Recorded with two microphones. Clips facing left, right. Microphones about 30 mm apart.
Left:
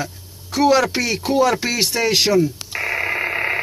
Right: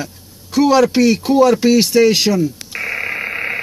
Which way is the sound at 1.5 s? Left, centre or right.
Left.